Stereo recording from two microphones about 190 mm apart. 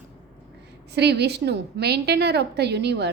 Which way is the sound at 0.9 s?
60° right (ahead or behind).